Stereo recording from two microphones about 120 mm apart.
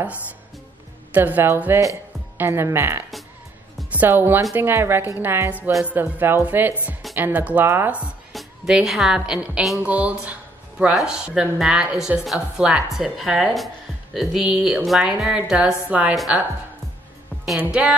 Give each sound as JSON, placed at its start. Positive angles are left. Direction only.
{"t": 1.1, "sound": "a woman's voice", "side_deg": -15}
{"t": 8.3, "sound": "a woman's voice", "side_deg": 0}